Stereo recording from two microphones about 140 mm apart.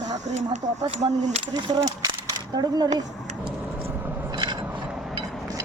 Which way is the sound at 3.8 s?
15° right (ahead or behind).